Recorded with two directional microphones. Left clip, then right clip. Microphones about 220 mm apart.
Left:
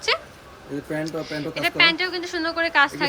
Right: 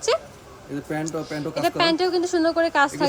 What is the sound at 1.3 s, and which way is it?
A woman's voice, 20° right (ahead or behind).